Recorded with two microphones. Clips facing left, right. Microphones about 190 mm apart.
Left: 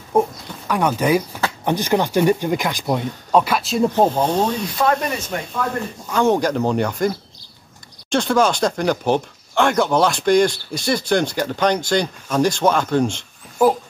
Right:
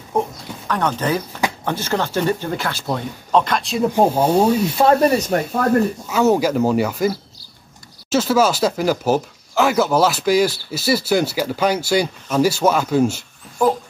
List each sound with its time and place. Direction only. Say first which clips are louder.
0.1 s speech: left 3 dB; 10° left (ahead or behind)
3.9 s speech: right 5 dB; 10° right (ahead or behind)
4.6 s speech: right 5 dB; 25° right (ahead or behind)
6.0 s speech: left 4 dB; 5° right (ahead or behind)